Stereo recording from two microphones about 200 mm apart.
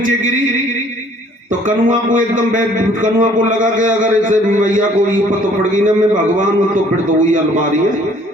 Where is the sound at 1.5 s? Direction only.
40° right (ahead or behind).